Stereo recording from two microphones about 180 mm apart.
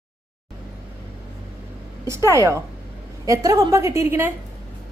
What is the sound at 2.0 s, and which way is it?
A woman's voice, 15° right (ahead or behind).